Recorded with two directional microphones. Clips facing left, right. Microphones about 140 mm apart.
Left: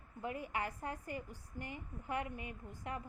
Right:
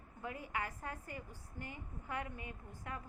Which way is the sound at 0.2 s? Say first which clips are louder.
Left 2 dB; 20° left (ahead or behind).